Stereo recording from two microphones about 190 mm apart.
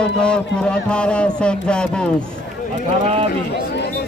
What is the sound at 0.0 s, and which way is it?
Speech, 5° left (ahead or behind).